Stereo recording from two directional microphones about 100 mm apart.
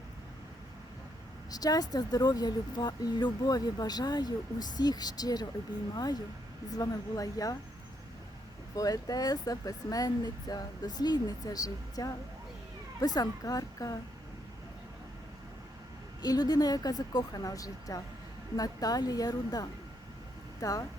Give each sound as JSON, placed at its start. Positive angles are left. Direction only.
{"t": 1.5, "sound": "speech", "side_deg": 40}
{"t": 8.7, "sound": "speech", "side_deg": 40}
{"t": 16.2, "sound": "speech", "side_deg": 40}